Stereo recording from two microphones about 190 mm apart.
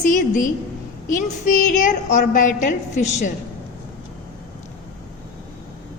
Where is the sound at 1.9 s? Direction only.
40° left (ahead or behind).